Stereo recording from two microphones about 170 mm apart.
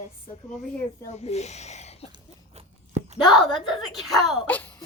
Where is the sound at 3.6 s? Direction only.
Centre (ahead or behind).